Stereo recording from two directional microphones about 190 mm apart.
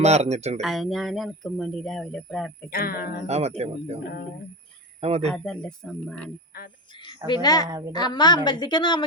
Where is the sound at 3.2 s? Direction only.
35° right (ahead or behind).